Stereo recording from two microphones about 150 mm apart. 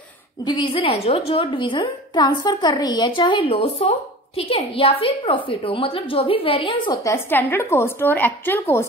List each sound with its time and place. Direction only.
0.4 s a woman's voice: 30° left (ahead or behind)
7.0 s a woman's voice: 15° left (ahead or behind)